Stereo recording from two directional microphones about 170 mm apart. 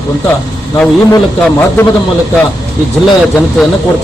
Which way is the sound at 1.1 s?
15° left (ahead or behind).